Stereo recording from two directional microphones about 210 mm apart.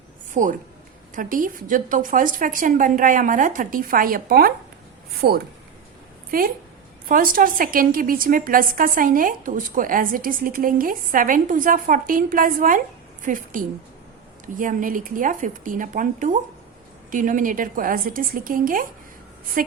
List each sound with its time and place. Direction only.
0.4 s a woman's voice: 35° right (ahead or behind)